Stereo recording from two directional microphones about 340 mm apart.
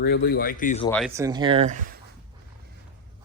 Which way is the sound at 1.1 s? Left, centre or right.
Centre.